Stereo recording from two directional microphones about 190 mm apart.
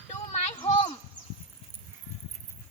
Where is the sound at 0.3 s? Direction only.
35° left (ahead or behind).